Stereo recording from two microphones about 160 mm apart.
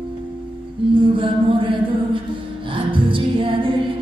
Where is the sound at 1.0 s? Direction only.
30° right (ahead or behind).